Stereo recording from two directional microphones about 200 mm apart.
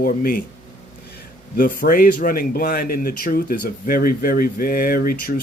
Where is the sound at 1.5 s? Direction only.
45° left (ahead or behind).